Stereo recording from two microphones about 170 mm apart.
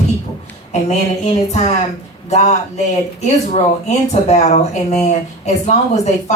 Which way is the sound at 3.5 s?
40° left (ahead or behind).